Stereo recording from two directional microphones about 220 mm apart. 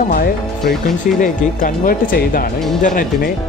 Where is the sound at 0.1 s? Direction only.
40° left (ahead or behind).